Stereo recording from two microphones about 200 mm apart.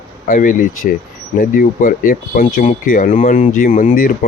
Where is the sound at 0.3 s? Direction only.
40° left (ahead or behind).